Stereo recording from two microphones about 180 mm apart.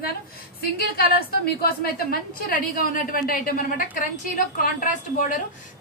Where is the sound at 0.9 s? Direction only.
60° left (ahead or behind).